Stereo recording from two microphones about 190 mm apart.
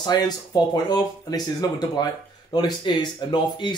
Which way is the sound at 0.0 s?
20° left (ahead or behind).